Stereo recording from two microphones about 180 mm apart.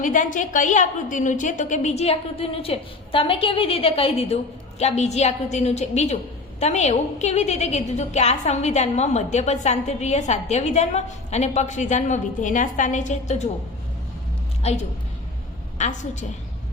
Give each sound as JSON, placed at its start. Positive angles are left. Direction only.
{"t": 0.0, "sound": "a woman's voice", "side_deg": 45}
{"t": 14.6, "sound": "a woman's voice", "side_deg": 35}